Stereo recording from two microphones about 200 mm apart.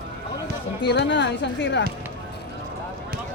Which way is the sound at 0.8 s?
60° left (ahead or behind).